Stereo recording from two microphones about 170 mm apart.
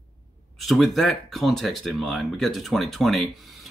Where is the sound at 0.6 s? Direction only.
Centre (ahead or behind).